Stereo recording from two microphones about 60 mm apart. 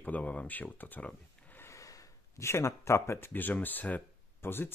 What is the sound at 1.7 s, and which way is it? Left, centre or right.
Gasp, left.